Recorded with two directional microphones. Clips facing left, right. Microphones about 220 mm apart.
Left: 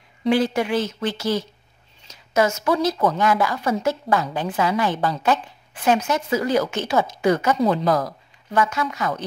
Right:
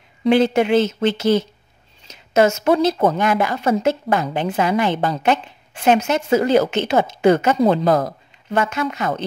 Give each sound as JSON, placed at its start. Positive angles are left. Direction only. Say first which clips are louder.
{"t": 0.3, "sound": "a woman's voice", "louder": "right 5 dB", "side_deg": -25}